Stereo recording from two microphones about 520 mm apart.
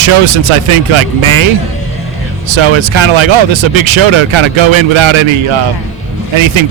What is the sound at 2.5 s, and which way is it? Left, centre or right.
Speech, right.